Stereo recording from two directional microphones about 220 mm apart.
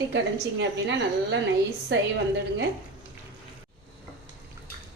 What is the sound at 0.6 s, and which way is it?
A woman's voice, 55° right (ahead or behind).